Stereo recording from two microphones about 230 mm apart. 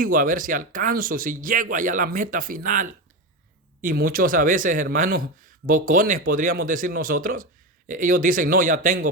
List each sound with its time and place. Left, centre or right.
0.0 s speech: right